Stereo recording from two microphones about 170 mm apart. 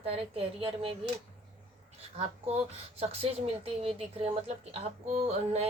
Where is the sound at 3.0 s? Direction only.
35° right (ahead or behind).